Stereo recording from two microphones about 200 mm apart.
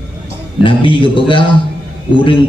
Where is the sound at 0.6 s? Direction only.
25° left (ahead or behind).